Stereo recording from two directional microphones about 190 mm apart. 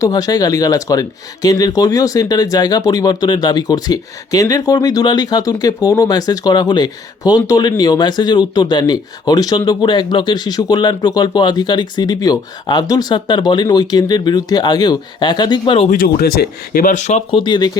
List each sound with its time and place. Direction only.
0.0 s speech: 20° left (ahead or behind)
15.9 s speech: 50° left (ahead or behind); by 17.7 s 25° left (ahead or behind)